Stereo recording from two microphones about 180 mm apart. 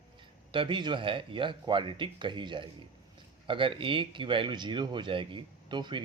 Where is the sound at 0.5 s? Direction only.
25° right (ahead or behind).